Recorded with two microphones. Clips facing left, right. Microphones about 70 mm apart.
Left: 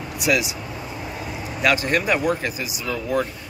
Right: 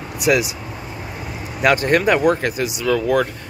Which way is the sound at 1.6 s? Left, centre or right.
Right.